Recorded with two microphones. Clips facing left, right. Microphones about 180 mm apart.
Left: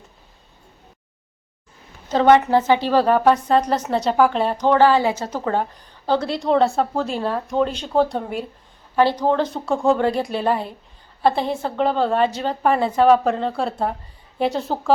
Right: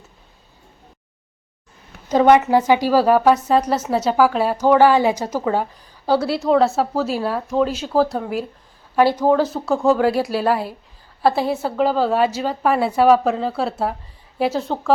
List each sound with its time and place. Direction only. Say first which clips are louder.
2.0 s a woman's voice: right 1 dB; 10° right (ahead or behind)